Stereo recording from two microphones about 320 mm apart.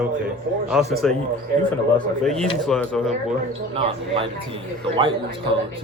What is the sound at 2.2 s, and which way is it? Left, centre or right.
Speech, centre.